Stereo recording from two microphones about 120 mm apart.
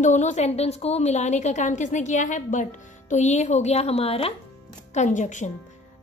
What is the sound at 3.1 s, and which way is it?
A woman's voice, 75° left (ahead or behind).